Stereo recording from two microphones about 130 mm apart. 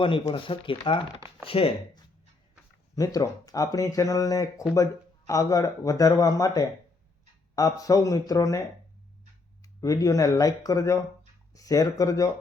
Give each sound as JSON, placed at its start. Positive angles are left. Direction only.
{"t": 0.0, "sound": "speech", "side_deg": 40}
{"t": 2.9, "sound": "speech", "side_deg": 25}